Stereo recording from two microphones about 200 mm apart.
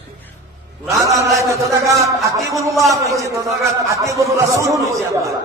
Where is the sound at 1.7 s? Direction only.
15° right (ahead or behind).